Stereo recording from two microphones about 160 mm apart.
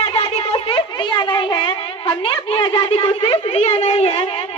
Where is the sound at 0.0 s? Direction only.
35° left (ahead or behind).